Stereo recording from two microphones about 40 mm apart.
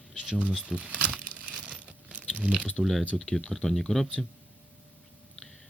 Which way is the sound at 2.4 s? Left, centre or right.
Right.